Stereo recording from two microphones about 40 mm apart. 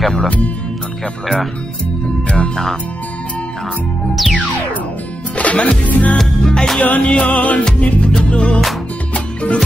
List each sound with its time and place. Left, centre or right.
0.0 s speech: centre
2.2 s speech: left
4.1 s music: centre
5.4 s music: left
6.1 s music: centre
6.8 s music: left